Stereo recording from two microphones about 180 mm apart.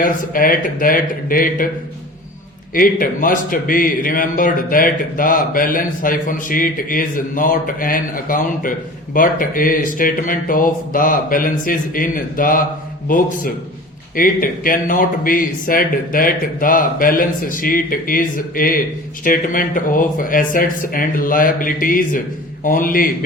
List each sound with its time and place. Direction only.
0.0 s a man's voice: 50° left (ahead or behind)
2.7 s a man's voice: 50° left (ahead or behind)